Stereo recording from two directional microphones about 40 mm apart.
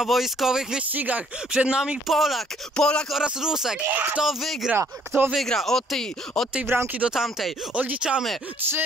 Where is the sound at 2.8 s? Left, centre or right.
Centre.